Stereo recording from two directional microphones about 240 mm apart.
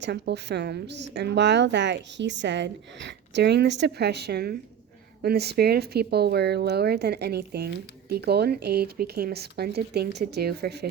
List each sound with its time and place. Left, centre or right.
0.0 s a woman's voice: right